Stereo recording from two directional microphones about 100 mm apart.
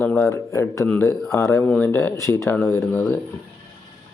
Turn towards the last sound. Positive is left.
turn(degrees=20)  # may be behind; listen again after turning